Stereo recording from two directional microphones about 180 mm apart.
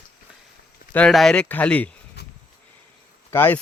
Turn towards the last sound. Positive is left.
turn(degrees=10)  # may be behind; listen again after turning